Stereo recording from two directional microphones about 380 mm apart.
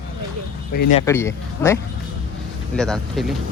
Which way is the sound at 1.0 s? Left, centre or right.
Centre.